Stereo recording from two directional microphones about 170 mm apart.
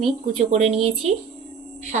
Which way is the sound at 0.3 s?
40° right (ahead or behind).